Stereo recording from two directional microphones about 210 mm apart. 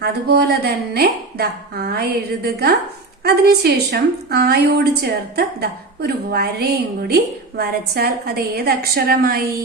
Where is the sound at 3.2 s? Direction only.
50° right (ahead or behind).